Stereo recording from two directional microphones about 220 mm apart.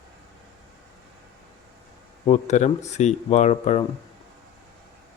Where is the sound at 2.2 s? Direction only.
30° left (ahead or behind).